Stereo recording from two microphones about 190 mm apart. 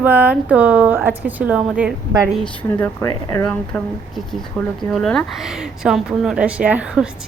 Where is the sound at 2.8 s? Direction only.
15° left (ahead or behind).